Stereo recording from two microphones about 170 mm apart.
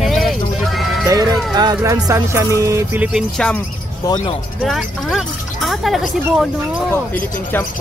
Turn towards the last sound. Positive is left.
turn(degrees=0)  # may be behind; listen again after turning